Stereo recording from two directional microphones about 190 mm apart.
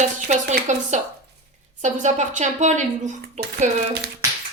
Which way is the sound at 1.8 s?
40° right (ahead or behind).